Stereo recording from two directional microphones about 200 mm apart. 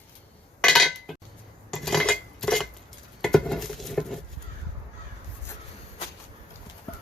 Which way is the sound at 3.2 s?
Centre (ahead or behind).